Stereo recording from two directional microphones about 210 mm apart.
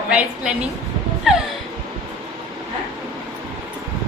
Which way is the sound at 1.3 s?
Centre (ahead or behind).